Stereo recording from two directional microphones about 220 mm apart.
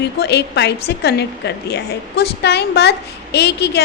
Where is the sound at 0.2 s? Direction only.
50° left (ahead or behind).